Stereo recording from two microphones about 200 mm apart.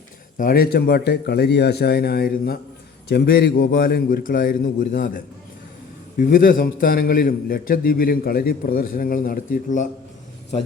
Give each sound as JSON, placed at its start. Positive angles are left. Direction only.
{"t": 0.3, "sound": "a man's voice", "side_deg": 45}